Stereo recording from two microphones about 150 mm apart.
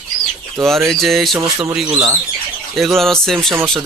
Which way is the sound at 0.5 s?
Centre (ahead or behind).